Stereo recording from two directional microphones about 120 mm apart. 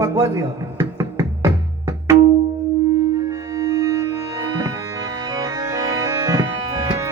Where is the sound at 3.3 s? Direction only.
30° right (ahead or behind).